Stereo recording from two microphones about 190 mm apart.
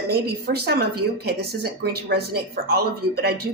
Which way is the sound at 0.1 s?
55° right (ahead or behind).